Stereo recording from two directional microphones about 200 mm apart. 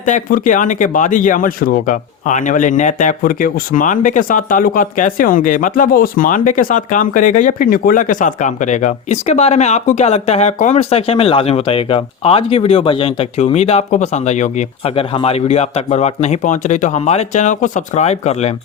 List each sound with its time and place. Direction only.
0.0 s speech: 40° left (ahead or behind)